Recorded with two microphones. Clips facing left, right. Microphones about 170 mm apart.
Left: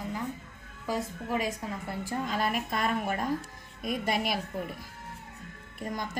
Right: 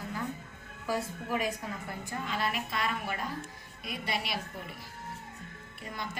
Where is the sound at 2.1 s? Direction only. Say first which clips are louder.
Left 4 dB; 40° left (ahead or behind).